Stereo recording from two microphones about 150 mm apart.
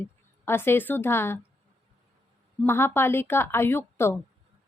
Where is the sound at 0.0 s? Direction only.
15° left (ahead or behind).